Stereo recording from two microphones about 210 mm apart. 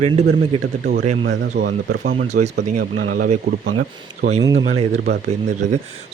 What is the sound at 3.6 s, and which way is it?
Speech, 60° right (ahead or behind).